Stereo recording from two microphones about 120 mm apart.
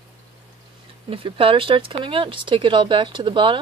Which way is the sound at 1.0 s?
50° right (ahead or behind).